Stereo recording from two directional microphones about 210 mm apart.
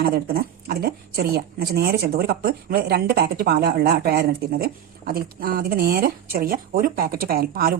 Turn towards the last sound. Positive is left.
turn(degrees=-45)  # may be behind; listen again after turning